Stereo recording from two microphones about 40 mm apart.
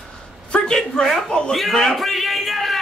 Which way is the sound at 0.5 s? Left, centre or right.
Left.